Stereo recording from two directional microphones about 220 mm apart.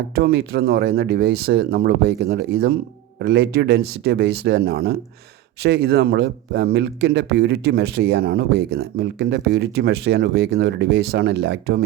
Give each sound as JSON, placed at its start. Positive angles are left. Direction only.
{"t": 0.2, "sound": "speech", "side_deg": -45}